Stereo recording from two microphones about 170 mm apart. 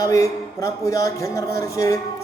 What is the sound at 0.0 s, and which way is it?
Speech, 20° left (ahead or behind).